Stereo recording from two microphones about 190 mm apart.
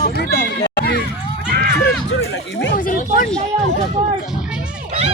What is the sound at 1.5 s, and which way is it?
Run, 50° right (ahead or behind).